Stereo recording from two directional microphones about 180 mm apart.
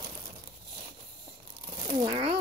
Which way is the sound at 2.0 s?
25° right (ahead or behind).